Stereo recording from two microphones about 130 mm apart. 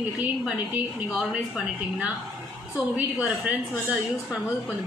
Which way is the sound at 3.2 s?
10° right (ahead or behind).